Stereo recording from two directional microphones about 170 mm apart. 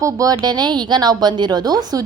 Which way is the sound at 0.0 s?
20° right (ahead or behind).